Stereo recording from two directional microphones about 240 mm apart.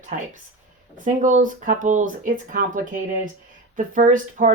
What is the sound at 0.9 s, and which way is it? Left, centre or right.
Speech, right.